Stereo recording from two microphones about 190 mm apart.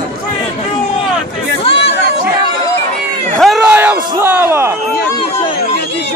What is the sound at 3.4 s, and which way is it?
Crowd, centre (ahead or behind).